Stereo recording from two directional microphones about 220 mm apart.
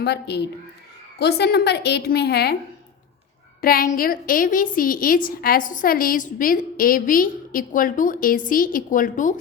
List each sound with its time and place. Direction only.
0.0 s a woman's voice: 50° left (ahead or behind)
3.6 s a woman's voice: 40° left (ahead or behind)